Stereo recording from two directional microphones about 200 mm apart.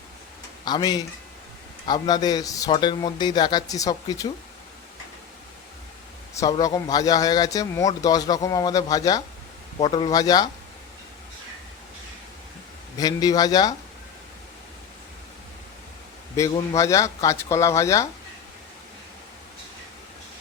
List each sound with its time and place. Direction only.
0.6 s speech: 20° left (ahead or behind)
6.3 s a man's voice: 15° left (ahead or behind)
13.0 s speech: 20° left (ahead or behind)
16.3 s a man's voice: 15° left (ahead or behind)